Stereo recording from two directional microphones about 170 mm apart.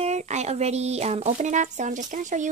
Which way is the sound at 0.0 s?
40° right (ahead or behind).